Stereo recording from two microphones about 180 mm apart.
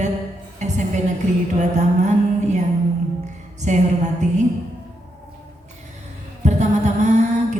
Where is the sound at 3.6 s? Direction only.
40° right (ahead or behind).